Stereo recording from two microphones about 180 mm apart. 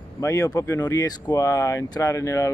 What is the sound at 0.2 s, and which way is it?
Speech, 20° left (ahead or behind).